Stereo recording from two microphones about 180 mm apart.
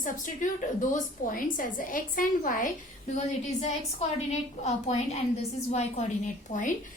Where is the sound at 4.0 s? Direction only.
35° left (ahead or behind).